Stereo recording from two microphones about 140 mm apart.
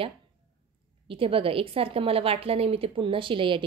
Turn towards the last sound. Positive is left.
turn(degrees=-35)  # may be behind; listen again after turning